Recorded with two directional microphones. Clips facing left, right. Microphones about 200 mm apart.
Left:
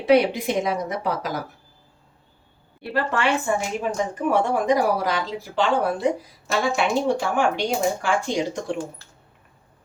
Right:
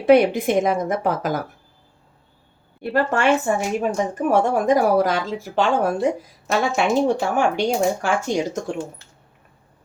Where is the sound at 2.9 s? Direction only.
40° right (ahead or behind).